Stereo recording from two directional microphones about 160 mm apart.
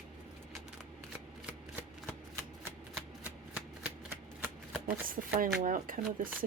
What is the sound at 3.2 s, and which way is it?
Shuffling cards, 10° right (ahead or behind).